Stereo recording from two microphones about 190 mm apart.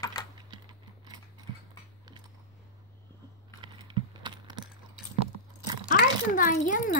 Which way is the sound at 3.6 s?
25° right (ahead or behind).